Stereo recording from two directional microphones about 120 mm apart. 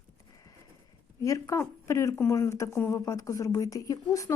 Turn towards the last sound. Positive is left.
turn(degrees=30)  # may be behind; listen again after turning